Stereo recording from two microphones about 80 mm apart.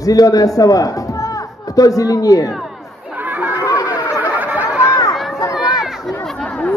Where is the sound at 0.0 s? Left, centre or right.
Left.